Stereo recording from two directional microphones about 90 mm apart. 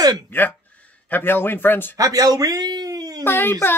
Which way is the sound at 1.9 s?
40° right (ahead or behind).